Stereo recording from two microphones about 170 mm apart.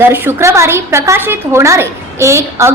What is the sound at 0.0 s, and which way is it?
A woman's voice, 15° right (ahead or behind).